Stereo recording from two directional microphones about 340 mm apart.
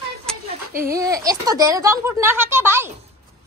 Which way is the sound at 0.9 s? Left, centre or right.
Centre.